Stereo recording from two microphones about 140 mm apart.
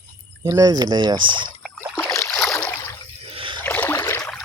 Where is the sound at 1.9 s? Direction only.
15° left (ahead or behind).